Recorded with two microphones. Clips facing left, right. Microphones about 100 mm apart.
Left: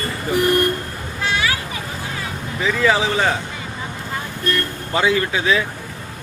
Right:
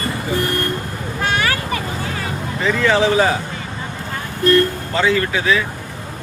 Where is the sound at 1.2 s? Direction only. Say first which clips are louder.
Right 2 dB; 50° right (ahead or behind).